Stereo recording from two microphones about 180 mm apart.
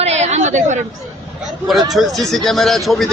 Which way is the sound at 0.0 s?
40° right (ahead or behind).